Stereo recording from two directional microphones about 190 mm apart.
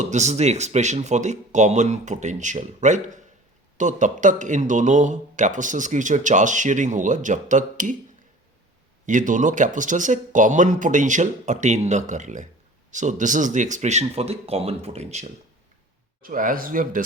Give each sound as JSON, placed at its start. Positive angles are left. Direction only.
{"t": 0.0, "sound": "speech", "side_deg": -40}
{"t": 9.0, "sound": "speech", "side_deg": -40}
{"t": 16.2, "sound": "speech", "side_deg": -45}